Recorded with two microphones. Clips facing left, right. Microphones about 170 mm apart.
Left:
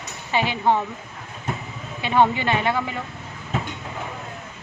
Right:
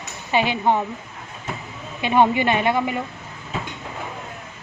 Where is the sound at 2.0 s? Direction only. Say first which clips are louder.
Right 2 dB; 15° right (ahead or behind).